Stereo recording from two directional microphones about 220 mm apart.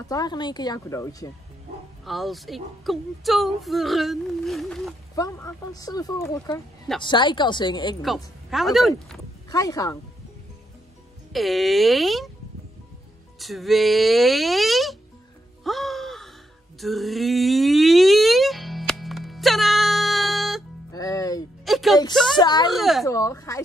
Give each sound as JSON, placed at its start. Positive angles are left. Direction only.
{"t": 0.0, "sound": "speech", "side_deg": 15}
{"t": 2.0, "sound": "speech", "side_deg": 0}
{"t": 5.1, "sound": "speech", "side_deg": 15}
{"t": 8.0, "sound": "speech", "side_deg": 0}
{"t": 9.5, "sound": "speech", "side_deg": 15}
{"t": 11.3, "sound": "speech", "side_deg": 0}
{"t": 13.4, "sound": "speech", "side_deg": 0}
{"t": 15.6, "sound": "music", "side_deg": 0}
{"t": 20.9, "sound": "music", "side_deg": 15}
{"t": 21.6, "sound": "music", "side_deg": 0}
{"t": 22.1, "sound": "speech", "side_deg": 0}
{"t": 22.4, "sound": "speech", "side_deg": 20}
{"t": 22.7, "sound": "speech", "side_deg": 0}
{"t": 23.0, "sound": "speech", "side_deg": 15}